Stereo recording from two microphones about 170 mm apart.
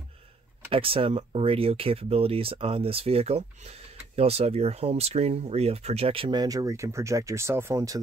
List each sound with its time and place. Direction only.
0.7 s speech: 35° right (ahead or behind)